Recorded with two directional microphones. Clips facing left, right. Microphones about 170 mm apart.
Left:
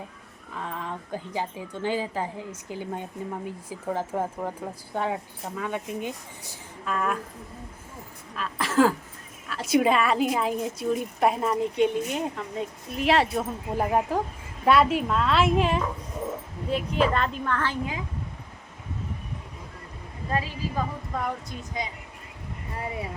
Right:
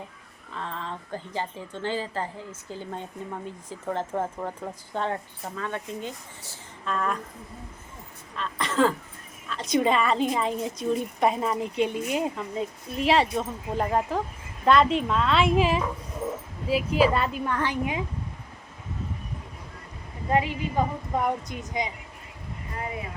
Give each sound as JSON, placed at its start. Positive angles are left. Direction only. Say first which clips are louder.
{"t": 0.5, "sound": "speech", "louder": "left 1 dB", "side_deg": 10}
{"t": 8.4, "sound": "a woman's voice", "louder": "left 2 dB", "side_deg": 5}
{"t": 20.3, "sound": "a woman's voice", "louder": "right 4 dB", "side_deg": -20}